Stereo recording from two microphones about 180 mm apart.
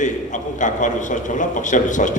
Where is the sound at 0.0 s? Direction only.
45° left (ahead or behind).